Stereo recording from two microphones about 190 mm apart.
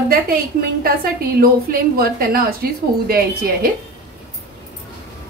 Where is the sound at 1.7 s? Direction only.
50° right (ahead or behind).